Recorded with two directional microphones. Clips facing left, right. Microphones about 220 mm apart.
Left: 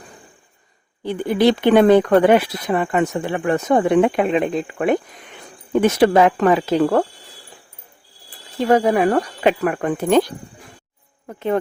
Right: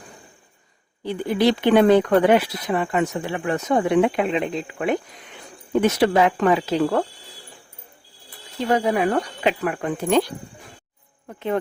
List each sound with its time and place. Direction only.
1.0 s speech: 55° left (ahead or behind)
8.7 s speech: 50° left (ahead or behind)